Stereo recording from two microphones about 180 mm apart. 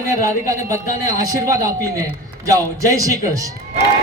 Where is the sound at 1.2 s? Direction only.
20° right (ahead or behind).